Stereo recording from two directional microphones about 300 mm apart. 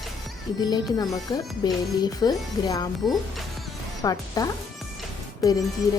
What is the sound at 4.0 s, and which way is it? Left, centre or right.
Speech, centre.